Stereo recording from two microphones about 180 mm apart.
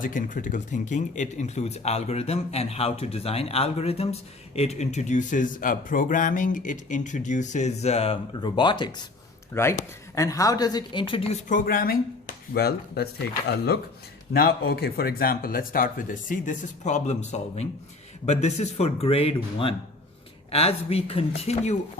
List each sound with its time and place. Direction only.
0.0 s speech: 50° left (ahead or behind); by 8.9 s 25° left (ahead or behind)
9.5 s speech: 15° left (ahead or behind); by 13.1 s 60° left (ahead or behind)
14.6 s speech: 65° left (ahead or behind); by 21.8 s 40° left (ahead or behind)